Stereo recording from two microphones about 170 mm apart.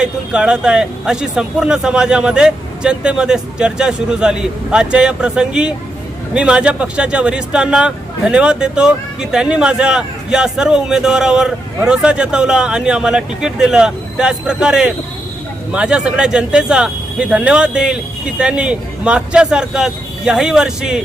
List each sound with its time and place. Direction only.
0.0 s speech: 5° right (ahead or behind)